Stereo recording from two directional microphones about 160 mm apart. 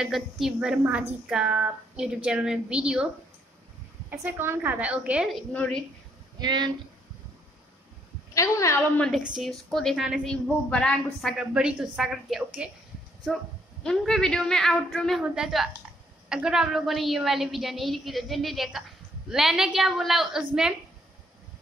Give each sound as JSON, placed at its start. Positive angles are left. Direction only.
{"t": 0.0, "sound": "a woman's voice", "side_deg": 0}
{"t": 4.1, "sound": "a woman's voice", "side_deg": -10}
{"t": 5.5, "sound": "a woman's voice", "side_deg": 5}
{"t": 6.4, "sound": "speech", "side_deg": -25}
{"t": 8.4, "sound": "a woman's voice", "side_deg": 20}
{"t": 9.0, "sound": "a woman's voice", "side_deg": -5}
{"t": 13.8, "sound": "a woman's voice", "side_deg": 5}